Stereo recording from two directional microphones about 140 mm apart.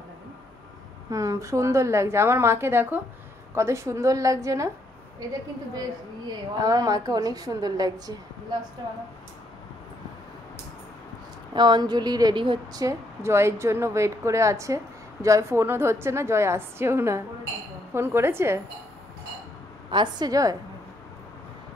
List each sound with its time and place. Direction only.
1.1 s a woman's voice: 25° right (ahead or behind)
5.8 s a woman's voice: 25° right (ahead or behind)
11.5 s a woman's voice: 30° right (ahead or behind)
12.8 s a woman's voice: 20° right (ahead or behind)
19.9 s a woman's voice: 30° right (ahead or behind)